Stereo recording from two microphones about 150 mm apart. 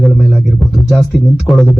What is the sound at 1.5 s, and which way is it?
Speech, centre (ahead or behind).